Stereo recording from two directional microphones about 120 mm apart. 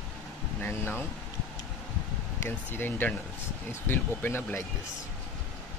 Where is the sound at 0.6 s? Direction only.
15° left (ahead or behind).